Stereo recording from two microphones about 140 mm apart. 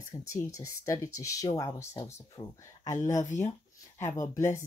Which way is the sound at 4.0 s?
20° left (ahead or behind).